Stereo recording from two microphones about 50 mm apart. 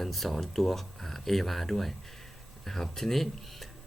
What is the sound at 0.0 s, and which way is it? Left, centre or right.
Speech, centre.